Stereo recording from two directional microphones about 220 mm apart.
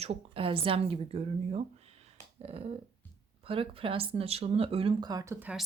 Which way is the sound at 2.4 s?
25° right (ahead or behind).